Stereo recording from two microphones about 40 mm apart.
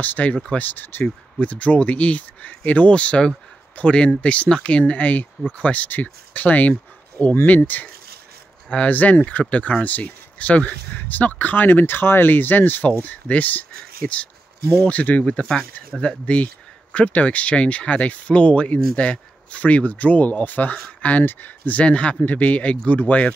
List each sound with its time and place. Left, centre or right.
0.0 s speech: left
1.0 s speech: left
2.9 s speech: left
8.6 s speech: left
11.0 s speech: left
21.2 s speech: left
21.8 s speech: left